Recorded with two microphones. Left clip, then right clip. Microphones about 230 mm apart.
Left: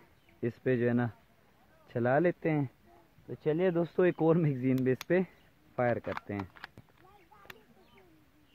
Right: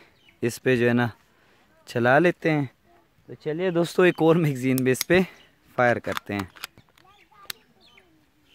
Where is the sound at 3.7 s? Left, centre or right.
Right.